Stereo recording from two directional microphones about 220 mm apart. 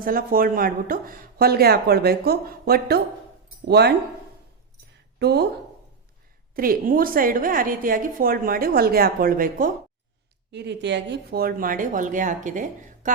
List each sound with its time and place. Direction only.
0.0 s speech: 40° right (ahead or behind)
5.2 s speech: 50° right (ahead or behind)
6.6 s a woman's voice: 40° right (ahead or behind)
10.5 s a woman's voice: 50° right (ahead or behind); by 13.1 s 35° right (ahead or behind)